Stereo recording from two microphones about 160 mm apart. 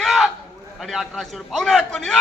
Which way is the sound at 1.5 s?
Centre (ahead or behind).